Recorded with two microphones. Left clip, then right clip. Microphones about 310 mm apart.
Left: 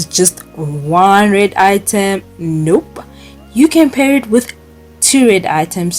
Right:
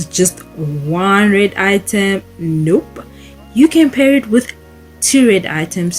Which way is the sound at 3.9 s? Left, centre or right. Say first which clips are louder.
Even; centre.